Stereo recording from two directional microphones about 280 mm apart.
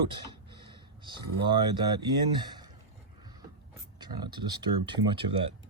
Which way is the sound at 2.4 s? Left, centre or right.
Centre.